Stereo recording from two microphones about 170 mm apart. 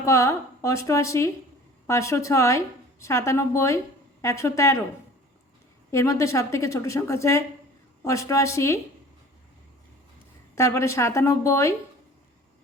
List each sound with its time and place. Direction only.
0.0 s a woman's voice: 20° left (ahead or behind)
5.9 s a woman's voice: 15° left (ahead or behind)
10.5 s a woman's voice: 15° left (ahead or behind)